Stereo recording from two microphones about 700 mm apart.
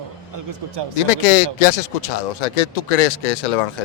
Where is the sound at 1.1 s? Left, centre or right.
Left.